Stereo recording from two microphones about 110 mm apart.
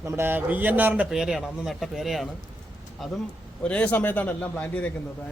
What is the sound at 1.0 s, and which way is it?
Speech, 5° right (ahead or behind).